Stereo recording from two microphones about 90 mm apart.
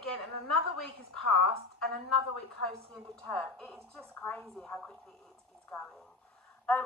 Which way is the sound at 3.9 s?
15° left (ahead or behind).